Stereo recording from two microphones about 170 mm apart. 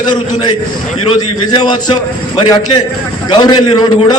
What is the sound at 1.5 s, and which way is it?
A man's voice, 25° left (ahead or behind).